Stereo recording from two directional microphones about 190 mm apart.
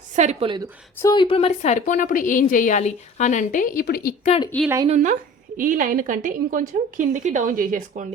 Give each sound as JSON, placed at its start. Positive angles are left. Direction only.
{"t": 0.2, "sound": "a woman's voice", "side_deg": -35}
{"t": 0.9, "sound": "a woman's voice", "side_deg": 20}
{"t": 4.2, "sound": "a woman's voice", "side_deg": 35}
{"t": 4.9, "sound": "a woman's voice", "side_deg": -40}